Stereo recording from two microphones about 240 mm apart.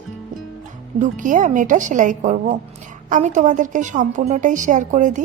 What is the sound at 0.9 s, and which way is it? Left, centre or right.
A woman's voice, right.